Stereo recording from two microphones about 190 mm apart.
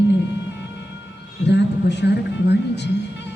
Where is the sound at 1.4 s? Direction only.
65° left (ahead or behind).